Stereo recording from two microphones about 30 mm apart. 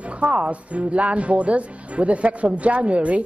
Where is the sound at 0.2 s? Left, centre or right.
Right.